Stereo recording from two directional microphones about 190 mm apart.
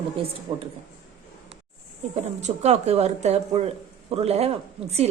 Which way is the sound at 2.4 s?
35° right (ahead or behind).